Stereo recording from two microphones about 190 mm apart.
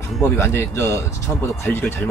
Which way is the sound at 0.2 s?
15° left (ahead or behind).